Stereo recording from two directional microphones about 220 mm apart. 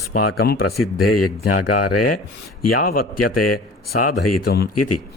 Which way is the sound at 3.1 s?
90° left.